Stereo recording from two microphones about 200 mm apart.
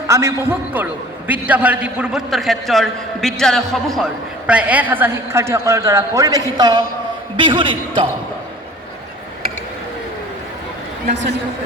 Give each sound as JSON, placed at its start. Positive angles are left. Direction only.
{"t": 0.1, "sound": "a man's voice", "side_deg": -15}